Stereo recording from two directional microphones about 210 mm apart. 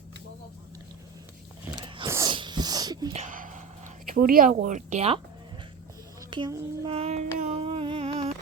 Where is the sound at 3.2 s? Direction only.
40° right (ahead or behind).